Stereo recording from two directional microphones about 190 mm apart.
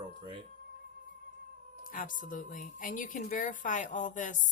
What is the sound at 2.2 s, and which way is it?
Speech, 45° left (ahead or behind).